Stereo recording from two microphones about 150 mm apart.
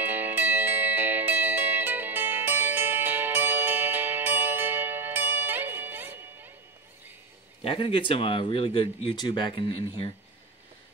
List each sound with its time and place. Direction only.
0.0 s music: 15° right (ahead or behind)
7.6 s speech: 35° left (ahead or behind)